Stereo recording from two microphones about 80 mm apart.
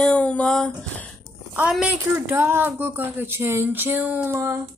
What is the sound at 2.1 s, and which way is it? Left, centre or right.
Speech, right.